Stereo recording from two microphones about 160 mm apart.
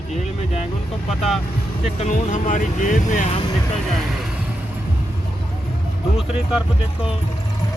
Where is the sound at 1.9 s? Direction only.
50° left (ahead or behind).